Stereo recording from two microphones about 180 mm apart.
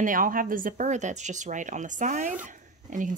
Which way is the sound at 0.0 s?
50° right (ahead or behind).